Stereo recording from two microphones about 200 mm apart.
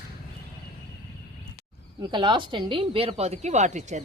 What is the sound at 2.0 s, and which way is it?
Speech, 25° right (ahead or behind).